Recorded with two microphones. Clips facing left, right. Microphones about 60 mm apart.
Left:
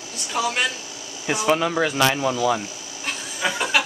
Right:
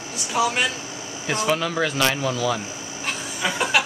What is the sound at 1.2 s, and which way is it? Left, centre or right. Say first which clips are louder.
Speech: left 2 dB; centre.